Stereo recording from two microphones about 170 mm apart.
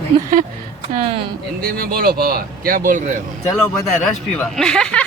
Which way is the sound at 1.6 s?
60° right (ahead or behind).